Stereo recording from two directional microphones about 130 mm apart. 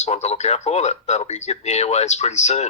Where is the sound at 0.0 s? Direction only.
60° left (ahead or behind).